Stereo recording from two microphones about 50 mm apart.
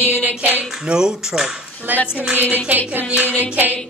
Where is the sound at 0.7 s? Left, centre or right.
Centre.